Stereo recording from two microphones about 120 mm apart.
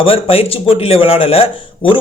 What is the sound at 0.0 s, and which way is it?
A man's voice, 50° left (ahead or behind).